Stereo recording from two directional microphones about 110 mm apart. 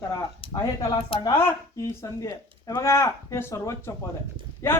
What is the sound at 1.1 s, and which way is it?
Speech, 55° left (ahead or behind).